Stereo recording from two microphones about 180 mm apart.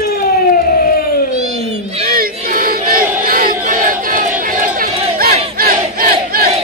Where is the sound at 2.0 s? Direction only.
55° right (ahead or behind).